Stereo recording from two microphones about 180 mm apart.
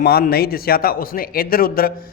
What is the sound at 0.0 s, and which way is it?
A man's voice, 60° left (ahead or behind).